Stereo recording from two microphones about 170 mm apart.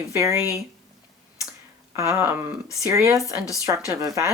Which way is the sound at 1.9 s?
15° right (ahead or behind).